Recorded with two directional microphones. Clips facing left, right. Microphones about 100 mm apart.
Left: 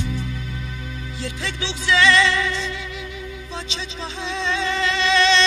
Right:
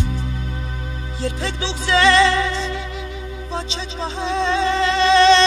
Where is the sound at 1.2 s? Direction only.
35° right (ahead or behind).